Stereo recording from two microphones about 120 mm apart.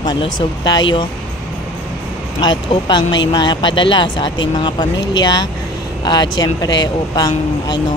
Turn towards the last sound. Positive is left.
turn(degrees=35)  # may be behind; listen again after turning